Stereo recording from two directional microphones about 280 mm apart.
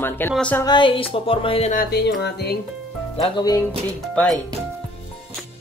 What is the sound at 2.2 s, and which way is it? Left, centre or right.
Speech, left.